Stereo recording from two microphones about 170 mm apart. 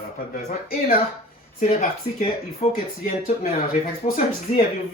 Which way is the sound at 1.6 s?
45° left (ahead or behind).